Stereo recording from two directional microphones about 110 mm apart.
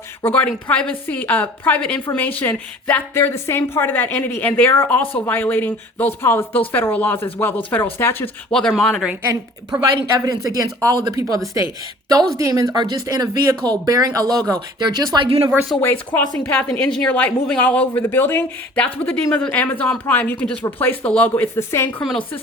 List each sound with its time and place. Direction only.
0.3 s a woman's voice: 15° left (ahead or behind)
8.8 s speech: 5° left (ahead or behind)
10.2 s speech: 30° right (ahead or behind)
15.8 s a woman's voice: 20° left (ahead or behind)